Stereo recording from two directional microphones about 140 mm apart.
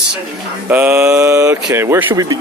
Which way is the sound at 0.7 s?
10° right (ahead or behind).